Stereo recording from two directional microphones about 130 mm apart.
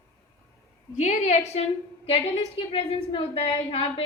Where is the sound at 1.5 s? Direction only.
50° left (ahead or behind).